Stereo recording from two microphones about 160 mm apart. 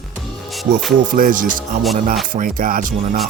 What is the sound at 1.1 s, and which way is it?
Music, 60° right (ahead or behind).